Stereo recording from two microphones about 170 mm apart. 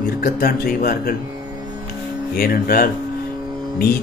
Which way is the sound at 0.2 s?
65° left (ahead or behind).